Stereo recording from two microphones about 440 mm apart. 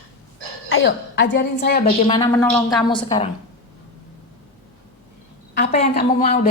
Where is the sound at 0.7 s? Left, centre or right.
Left.